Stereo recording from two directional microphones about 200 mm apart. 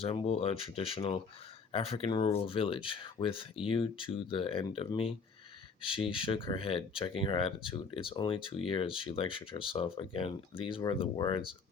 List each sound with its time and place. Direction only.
0.0 s speech: 30° left (ahead or behind)